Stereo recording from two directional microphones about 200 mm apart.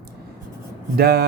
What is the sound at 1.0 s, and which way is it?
Speech, 50° right (ahead or behind).